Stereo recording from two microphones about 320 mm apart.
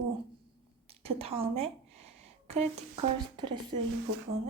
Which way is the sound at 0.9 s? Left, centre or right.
Centre.